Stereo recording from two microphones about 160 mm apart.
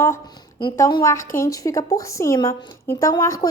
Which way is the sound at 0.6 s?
30° left (ahead or behind).